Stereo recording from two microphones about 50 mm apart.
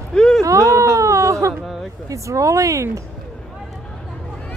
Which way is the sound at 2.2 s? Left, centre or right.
Right.